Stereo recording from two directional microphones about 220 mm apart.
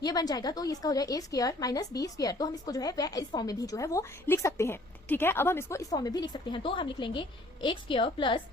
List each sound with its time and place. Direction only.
0.0 s a woman's voice: 15° left (ahead or behind)